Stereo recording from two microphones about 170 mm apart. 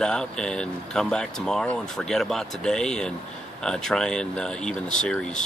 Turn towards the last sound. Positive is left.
turn(degrees=5)  # may be behind; listen again after turning